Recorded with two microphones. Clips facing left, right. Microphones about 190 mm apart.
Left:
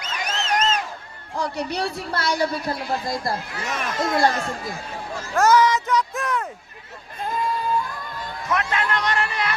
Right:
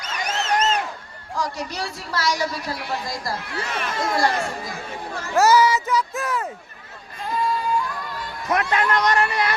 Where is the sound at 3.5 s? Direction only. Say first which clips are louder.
Right 1 dB; 30° right (ahead or behind).